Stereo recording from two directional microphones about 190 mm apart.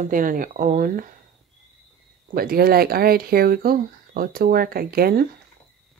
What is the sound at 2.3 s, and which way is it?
Speech, 50° right (ahead or behind).